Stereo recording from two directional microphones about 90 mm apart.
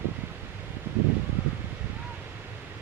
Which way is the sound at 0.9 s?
20° right (ahead or behind).